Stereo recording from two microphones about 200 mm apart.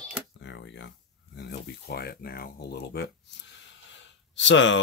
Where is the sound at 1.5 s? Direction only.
55° left (ahead or behind).